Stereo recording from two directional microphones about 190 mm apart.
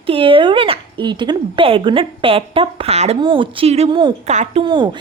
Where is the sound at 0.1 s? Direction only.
25° right (ahead or behind).